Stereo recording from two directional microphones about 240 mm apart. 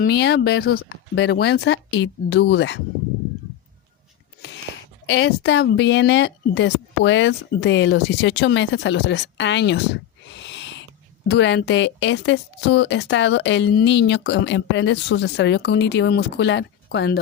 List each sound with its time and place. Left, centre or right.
0.0 s a woman's voice: left
5.0 s a woman's voice: left
10.5 s owl: left
11.3 s a woman's voice: left